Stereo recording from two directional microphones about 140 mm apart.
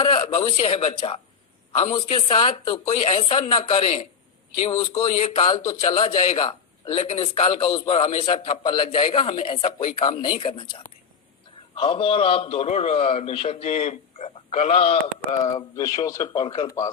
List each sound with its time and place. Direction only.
0.6 s a man's voice: 40° left (ahead or behind)
2.5 s speech: 25° left (ahead or behind)
3.0 s a man's voice: 45° left (ahead or behind)
5.6 s a man's voice: 35° left (ahead or behind)
6.0 s a man's voice: 45° left (ahead or behind)
15.5 s speech: 25° left (ahead or behind)